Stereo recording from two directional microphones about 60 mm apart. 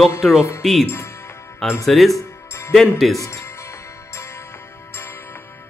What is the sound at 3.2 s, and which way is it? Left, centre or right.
Music, left.